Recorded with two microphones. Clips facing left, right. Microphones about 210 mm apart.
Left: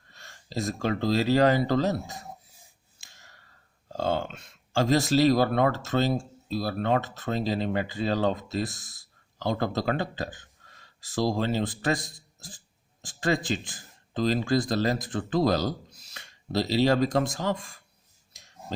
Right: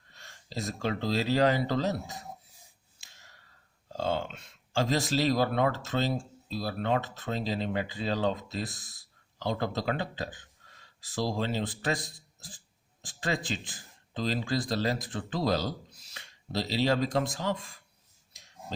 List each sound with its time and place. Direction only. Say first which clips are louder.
0.1 s speech: left 5 dB; 45° left (ahead or behind)
3.0 s a sound: left 3 dB; 45° left (ahead or behind)
3.8 s speech: left 3 dB; 50° left (ahead or behind)